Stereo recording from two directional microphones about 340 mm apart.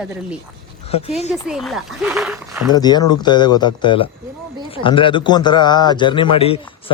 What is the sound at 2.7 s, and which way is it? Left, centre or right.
A man's voice, centre.